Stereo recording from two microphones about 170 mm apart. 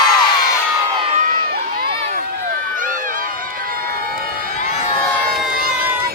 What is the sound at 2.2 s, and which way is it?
Run, 55° right (ahead or behind).